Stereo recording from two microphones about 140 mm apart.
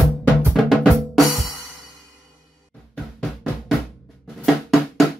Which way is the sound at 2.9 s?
Centre (ahead or behind).